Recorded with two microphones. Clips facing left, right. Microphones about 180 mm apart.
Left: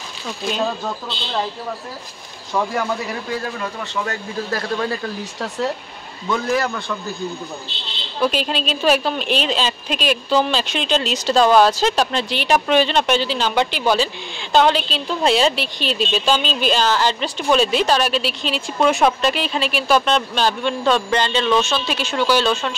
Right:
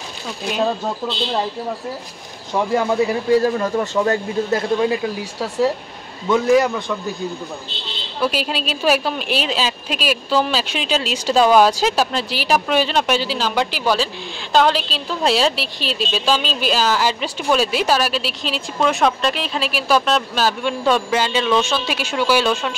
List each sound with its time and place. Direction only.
2.5 s speech: 20° right (ahead or behind)
3.5 s speech: 40° right (ahead or behind); by 6.8 s 15° right (ahead or behind)
8.2 s a woman's voice: 5° right (ahead or behind)